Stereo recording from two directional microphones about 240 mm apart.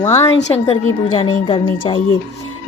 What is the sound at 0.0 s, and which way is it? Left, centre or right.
Speech, centre.